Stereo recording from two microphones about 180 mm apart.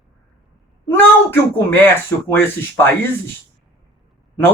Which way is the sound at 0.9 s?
10° left (ahead or behind).